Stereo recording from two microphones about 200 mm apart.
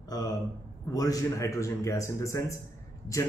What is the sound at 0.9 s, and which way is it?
Speech, 15° left (ahead or behind).